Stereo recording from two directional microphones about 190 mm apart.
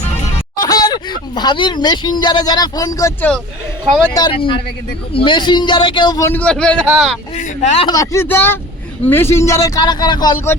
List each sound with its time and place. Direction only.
0.6 s a man's voice: 20° left (ahead or behind); by 7.2 s 5° left (ahead or behind)
7.3 s speech: 35° left (ahead or behind)
7.9 s speech: 15° left (ahead or behind)